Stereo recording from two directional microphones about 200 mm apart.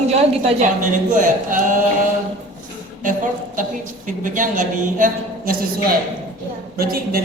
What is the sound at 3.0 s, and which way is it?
A woman's voice, 40° right (ahead or behind).